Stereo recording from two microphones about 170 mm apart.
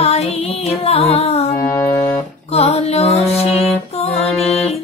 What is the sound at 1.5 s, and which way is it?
Music, 10° left (ahead or behind).